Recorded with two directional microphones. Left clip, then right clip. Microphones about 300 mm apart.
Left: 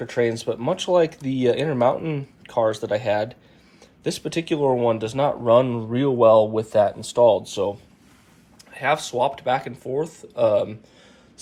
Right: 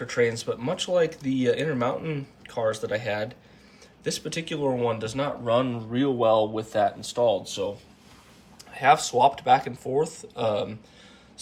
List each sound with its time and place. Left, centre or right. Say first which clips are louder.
0.0 s speech: left 2 dB; centre
8.7 s speech: right 2 dB; centre